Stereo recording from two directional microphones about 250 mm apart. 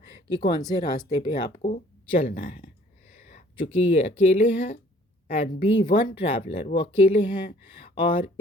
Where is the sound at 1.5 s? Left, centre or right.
Left.